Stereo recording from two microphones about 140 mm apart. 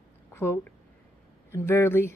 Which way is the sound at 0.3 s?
15° left (ahead or behind).